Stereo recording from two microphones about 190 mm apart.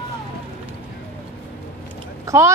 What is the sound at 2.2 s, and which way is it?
Vehicle, 15° right (ahead or behind).